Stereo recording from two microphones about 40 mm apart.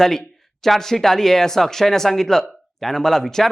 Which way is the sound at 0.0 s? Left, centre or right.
Centre.